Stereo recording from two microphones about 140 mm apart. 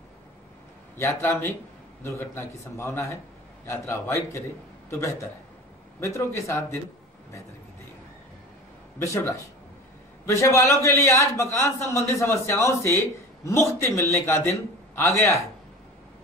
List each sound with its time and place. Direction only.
0.9 s a man's voice: 20° left (ahead or behind)
9.0 s a man's voice: 20° left (ahead or behind)